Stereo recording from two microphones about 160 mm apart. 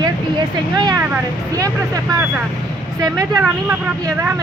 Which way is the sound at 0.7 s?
25° right (ahead or behind).